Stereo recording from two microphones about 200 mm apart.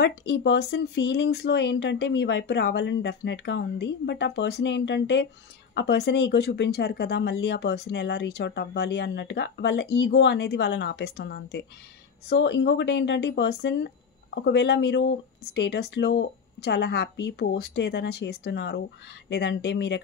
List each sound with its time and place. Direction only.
0.0 s speech: 60° left (ahead or behind)